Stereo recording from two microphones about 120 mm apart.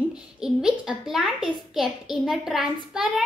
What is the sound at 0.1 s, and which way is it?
A child's voice, 5° right (ahead or behind).